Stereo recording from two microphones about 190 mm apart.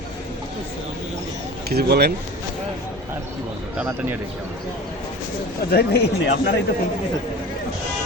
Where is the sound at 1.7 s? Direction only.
55° right (ahead or behind).